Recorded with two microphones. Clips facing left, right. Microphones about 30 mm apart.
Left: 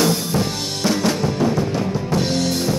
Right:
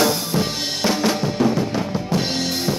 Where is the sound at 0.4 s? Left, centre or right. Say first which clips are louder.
Even; centre.